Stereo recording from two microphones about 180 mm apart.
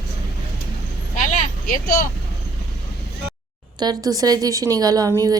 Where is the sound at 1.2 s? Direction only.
45° left (ahead or behind).